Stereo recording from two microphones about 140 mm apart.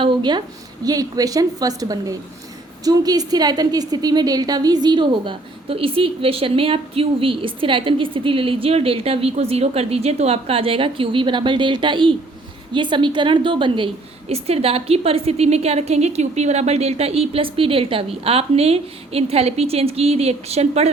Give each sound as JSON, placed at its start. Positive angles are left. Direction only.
{"t": 0.0, "sound": "a woman's voice", "side_deg": -35}